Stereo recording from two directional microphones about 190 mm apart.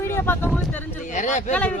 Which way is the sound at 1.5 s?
5° left (ahead or behind).